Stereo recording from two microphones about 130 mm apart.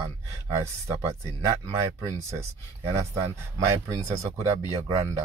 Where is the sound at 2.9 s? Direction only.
20° right (ahead or behind).